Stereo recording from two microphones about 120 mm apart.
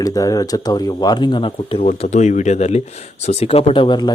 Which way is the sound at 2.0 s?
80° left.